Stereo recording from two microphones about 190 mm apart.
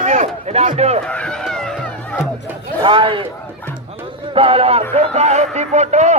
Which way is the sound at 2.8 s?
25° right (ahead or behind).